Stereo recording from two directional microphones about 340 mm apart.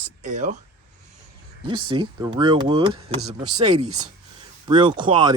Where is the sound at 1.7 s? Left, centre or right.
Centre.